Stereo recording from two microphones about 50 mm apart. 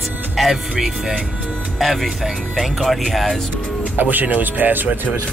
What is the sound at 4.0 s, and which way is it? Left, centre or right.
Speech, right.